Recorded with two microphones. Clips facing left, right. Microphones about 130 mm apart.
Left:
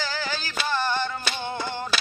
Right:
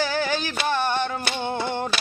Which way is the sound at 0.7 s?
60° right (ahead or behind).